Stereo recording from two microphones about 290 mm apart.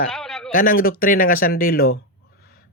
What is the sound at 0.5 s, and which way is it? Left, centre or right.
Speech, left.